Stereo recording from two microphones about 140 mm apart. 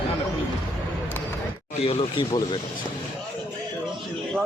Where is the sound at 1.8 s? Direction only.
45° left (ahead or behind).